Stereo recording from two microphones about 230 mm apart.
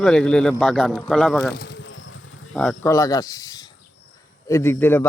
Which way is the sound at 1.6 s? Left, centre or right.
Left.